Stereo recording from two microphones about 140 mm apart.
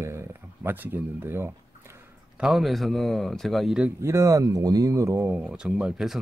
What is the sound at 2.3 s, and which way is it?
Speech, 5° right (ahead or behind).